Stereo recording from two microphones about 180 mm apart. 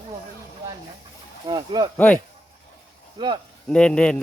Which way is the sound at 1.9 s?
10° left (ahead or behind).